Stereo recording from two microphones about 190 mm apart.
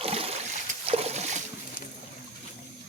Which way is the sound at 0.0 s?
30° right (ahead or behind).